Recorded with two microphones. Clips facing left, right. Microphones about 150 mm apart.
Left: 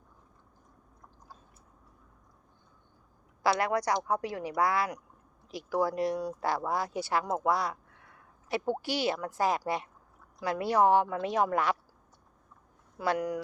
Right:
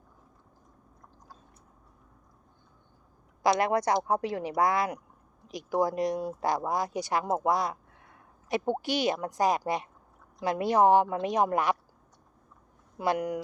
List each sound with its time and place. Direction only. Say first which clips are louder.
3.4 s a woman's voice: right 3 dB; 20° right (ahead or behind)
13.0 s speech: right 2 dB; 20° right (ahead or behind)